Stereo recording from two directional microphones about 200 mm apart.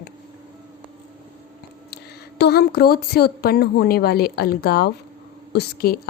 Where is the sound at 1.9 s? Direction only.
55° left (ahead or behind).